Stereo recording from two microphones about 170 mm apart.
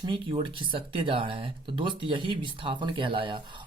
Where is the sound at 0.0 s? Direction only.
30° right (ahead or behind).